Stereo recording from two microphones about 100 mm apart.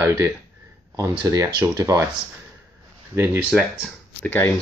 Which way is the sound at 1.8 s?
30° right (ahead or behind).